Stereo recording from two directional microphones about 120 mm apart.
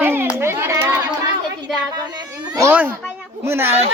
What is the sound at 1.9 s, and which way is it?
Speech, 30° right (ahead or behind).